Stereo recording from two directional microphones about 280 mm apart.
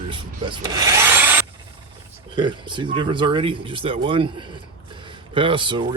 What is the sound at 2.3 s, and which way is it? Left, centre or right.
Speech, centre.